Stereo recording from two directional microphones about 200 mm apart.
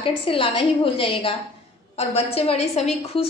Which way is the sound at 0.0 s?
25° left (ahead or behind).